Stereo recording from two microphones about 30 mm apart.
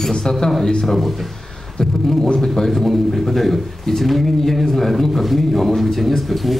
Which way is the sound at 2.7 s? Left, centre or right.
Centre.